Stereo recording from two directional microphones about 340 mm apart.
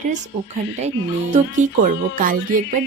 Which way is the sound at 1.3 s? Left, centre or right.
Right.